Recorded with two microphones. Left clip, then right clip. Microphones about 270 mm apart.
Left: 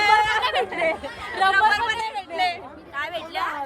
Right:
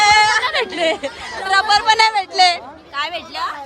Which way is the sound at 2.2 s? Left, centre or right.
Right.